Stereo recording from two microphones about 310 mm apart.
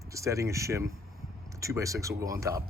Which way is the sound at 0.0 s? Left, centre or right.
Centre.